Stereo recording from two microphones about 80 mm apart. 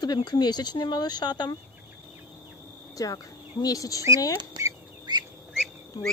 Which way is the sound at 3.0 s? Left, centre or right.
Left.